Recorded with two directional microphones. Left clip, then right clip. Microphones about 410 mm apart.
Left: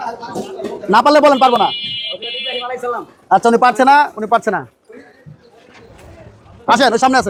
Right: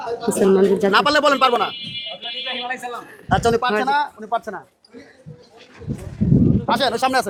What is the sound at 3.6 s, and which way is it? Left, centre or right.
Speech, left.